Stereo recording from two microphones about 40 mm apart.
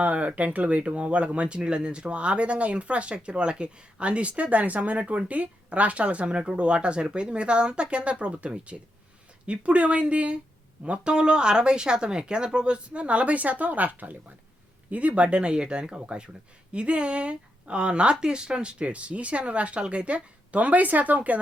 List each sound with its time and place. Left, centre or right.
0.0 s speech: right